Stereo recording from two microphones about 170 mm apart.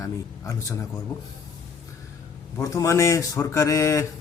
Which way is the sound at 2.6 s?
20° left (ahead or behind).